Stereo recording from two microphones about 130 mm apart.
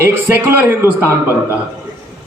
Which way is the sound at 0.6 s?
15° right (ahead or behind).